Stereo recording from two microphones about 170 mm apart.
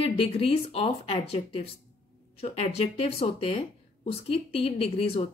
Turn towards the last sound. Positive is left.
turn(degrees=35)  # may be behind; listen again after turning